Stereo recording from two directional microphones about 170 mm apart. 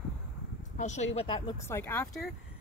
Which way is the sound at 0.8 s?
40° left (ahead or behind).